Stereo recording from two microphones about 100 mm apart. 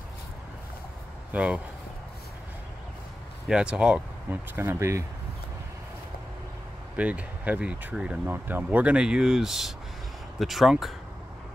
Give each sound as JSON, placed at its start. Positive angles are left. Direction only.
{"t": 1.3, "sound": "speech", "side_deg": -10}
{"t": 3.4, "sound": "speech", "side_deg": -5}
{"t": 4.3, "sound": "speech", "side_deg": -25}
{"t": 7.0, "sound": "speech", "side_deg": -15}
{"t": 8.3, "sound": "speech", "side_deg": -20}